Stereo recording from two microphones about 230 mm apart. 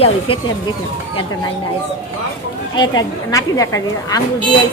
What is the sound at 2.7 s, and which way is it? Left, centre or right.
A man's voice, centre.